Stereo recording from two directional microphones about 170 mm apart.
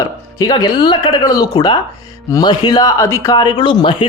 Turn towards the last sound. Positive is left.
turn(degrees=30)  # may be behind; listen again after turning